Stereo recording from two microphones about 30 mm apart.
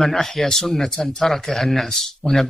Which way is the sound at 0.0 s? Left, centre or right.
Centre.